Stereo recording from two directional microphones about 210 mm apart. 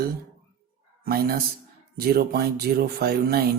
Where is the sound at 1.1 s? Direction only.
45° right (ahead or behind).